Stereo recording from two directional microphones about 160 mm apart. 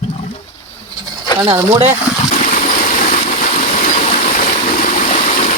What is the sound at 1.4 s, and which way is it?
Speech, 35° right (ahead or behind).